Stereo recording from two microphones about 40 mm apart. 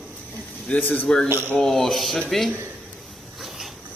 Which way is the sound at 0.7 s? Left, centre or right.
Left.